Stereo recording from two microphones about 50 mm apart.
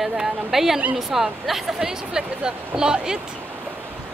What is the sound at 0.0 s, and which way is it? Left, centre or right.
A woman's voice, centre.